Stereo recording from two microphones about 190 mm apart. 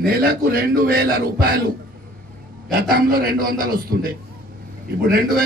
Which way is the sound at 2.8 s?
50° right (ahead or behind).